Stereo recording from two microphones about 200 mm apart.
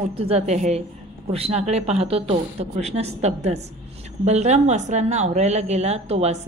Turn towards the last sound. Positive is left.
turn(degrees=-30)  # may be behind; listen again after turning